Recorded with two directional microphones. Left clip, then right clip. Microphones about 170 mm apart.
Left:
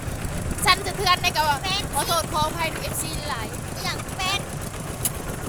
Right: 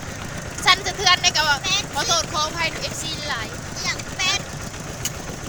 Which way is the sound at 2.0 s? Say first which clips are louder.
Left 1 dB; centre (ahead or behind).